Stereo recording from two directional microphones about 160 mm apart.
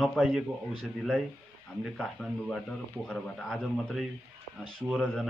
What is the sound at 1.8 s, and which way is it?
Speech, centre (ahead or behind).